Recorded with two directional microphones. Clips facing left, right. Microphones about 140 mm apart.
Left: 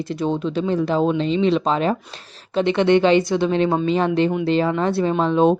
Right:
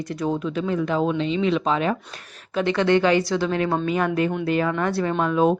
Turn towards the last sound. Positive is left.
turn(degrees=25)  # may be behind; listen again after turning